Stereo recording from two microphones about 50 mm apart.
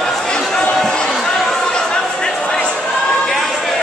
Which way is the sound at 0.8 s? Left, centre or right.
Centre.